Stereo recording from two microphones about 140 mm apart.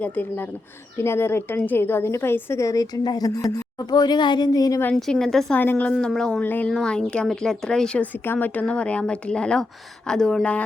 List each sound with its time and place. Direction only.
0.0 s a woman's voice: 15° left (ahead or behind)
4.9 s a woman's voice: centre (ahead or behind)